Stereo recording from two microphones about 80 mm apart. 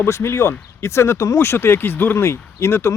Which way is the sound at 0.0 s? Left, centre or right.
Left.